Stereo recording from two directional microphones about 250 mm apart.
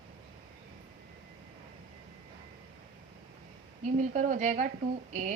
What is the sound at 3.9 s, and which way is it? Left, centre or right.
Speech, right.